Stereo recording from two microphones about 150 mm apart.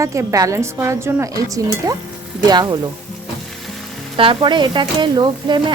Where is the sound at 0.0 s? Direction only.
20° right (ahead or behind).